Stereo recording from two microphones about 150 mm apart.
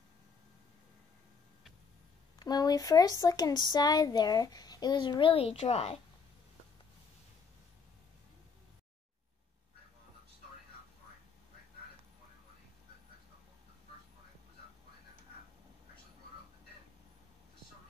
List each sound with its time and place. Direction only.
2.3 s speech: 25° left (ahead or behind); by 5.9 s 45° left (ahead or behind)